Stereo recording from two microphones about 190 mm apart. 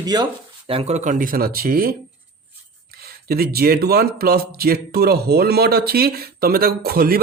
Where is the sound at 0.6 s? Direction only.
30° right (ahead or behind); by 1.9 s 50° right (ahead or behind).